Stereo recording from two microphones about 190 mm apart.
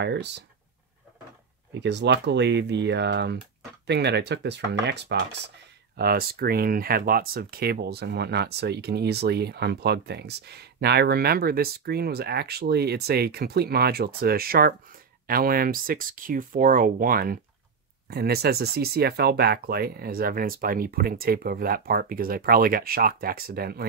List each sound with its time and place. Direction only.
0.0 s speech: 65° right (ahead or behind)
1.7 s speech: 65° right (ahead or behind)